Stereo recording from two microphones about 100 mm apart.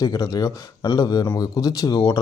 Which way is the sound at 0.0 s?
40° left (ahead or behind).